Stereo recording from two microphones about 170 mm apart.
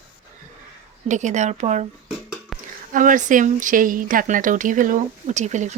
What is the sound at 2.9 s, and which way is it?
Speech, 50° right (ahead or behind).